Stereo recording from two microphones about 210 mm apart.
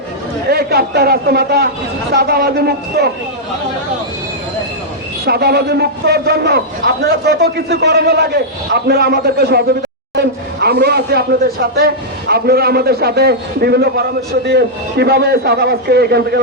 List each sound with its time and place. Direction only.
0.5 s a man's voice: 45° right (ahead or behind)
5.2 s a man's voice: 50° right (ahead or behind)